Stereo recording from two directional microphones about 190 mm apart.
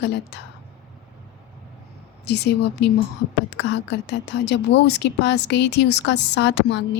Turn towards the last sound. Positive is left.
turn(degrees=65)  # may be behind; listen again after turning